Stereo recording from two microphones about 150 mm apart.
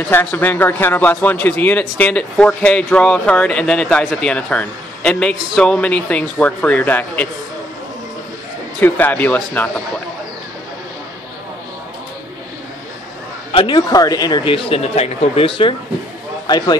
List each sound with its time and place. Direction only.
0.1 s a man's voice: 15° left (ahead or behind)
8.7 s a man's voice: 10° left (ahead or behind)
13.5 s a man's voice: 30° left (ahead or behind)